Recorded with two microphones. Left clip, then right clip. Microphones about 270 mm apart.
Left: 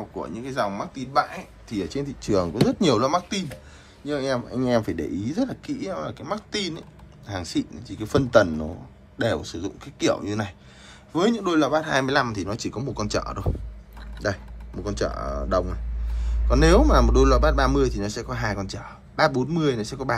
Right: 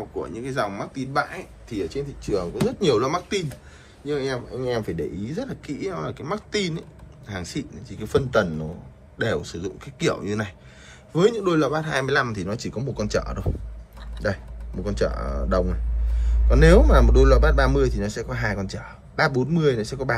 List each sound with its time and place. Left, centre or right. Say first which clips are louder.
0.2 s speech: even; centre